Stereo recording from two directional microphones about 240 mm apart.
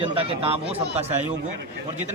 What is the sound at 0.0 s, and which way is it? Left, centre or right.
Speech, right.